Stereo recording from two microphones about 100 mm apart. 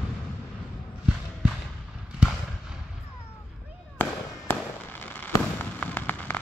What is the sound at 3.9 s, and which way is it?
Fireworks, 20° left (ahead or behind).